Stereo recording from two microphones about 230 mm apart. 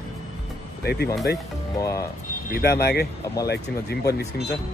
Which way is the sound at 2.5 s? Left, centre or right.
Left.